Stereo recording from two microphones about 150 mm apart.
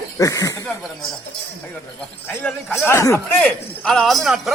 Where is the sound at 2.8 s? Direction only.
20° left (ahead or behind).